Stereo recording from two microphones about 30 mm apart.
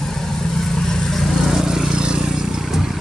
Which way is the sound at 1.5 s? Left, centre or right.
Centre.